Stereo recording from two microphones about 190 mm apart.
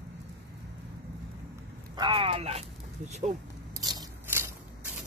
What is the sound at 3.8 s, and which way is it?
Scissors, 20° right (ahead or behind).